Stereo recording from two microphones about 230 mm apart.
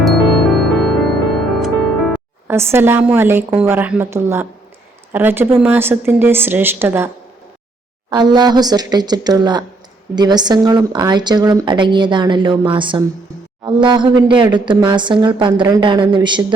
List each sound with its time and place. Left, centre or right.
0.0 s music: centre
2.5 s speech: centre
8.1 s a woman's voice: centre